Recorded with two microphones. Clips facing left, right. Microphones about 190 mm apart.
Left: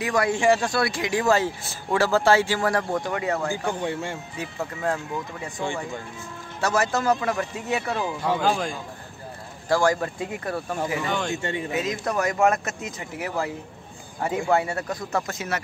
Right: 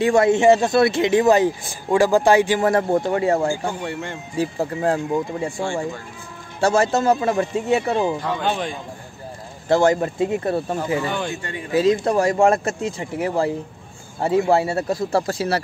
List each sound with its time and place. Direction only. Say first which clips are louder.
0.0 s speech: right 7 dB; 25° right (ahead or behind)
3.8 s speech: even; 10° left (ahead or behind)
4.4 s speech: right 11 dB; 30° right (ahead or behind)
6.6 s speech: right 6 dB; 30° right (ahead or behind)
8.2 s speech: even; centre (ahead or behind)
9.7 s speech: right 5 dB; 25° right (ahead or behind)
11.1 s speech: right 2 dB; 5° right (ahead or behind)
11.7 s speech: right 12 dB; 30° right (ahead or behind)